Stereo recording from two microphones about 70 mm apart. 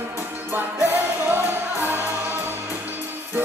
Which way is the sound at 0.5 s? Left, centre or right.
Right.